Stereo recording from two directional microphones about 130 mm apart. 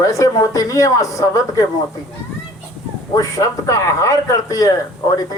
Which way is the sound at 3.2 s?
25° left (ahead or behind).